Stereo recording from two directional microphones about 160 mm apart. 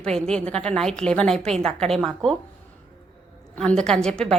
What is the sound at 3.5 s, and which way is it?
Speech, 5° left (ahead or behind).